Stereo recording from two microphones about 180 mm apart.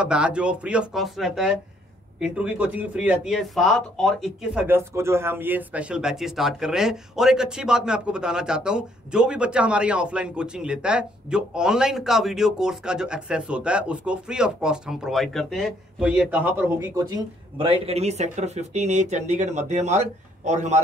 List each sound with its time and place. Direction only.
0.0 s speech: 5° right (ahead or behind)
4.6 s speech: 10° right (ahead or behind)
17.6 s speech: 30° right (ahead or behind)